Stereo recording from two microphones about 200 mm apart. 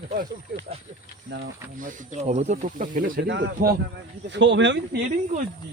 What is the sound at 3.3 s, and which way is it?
Speech, 65° right (ahead or behind).